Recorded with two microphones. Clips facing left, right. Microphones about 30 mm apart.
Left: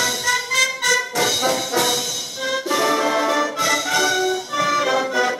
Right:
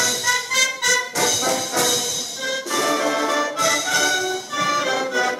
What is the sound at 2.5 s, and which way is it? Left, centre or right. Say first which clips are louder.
Music: left 2 dB; centre.